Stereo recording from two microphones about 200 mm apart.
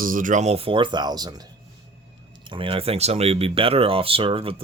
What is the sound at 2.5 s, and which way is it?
Speech, 25° right (ahead or behind).